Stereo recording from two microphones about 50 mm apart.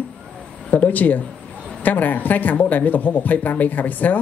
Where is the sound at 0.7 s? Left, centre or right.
Left.